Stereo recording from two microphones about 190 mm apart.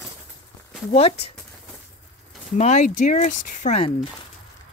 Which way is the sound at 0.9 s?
30° left (ahead or behind).